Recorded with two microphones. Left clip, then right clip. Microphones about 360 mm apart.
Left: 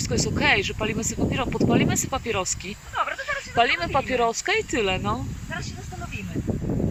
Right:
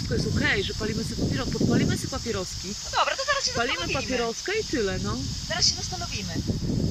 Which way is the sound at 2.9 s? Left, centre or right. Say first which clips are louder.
Right 2 dB; centre.